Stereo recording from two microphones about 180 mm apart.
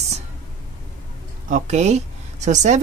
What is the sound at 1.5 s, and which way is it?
Speech, 40° right (ahead or behind).